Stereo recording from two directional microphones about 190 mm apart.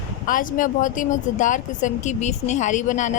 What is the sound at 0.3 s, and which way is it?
Speech, 45° left (ahead or behind).